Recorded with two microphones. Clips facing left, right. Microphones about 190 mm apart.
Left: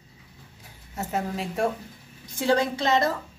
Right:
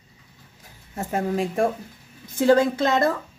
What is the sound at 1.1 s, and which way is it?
A woman's voice, 50° right (ahead or behind).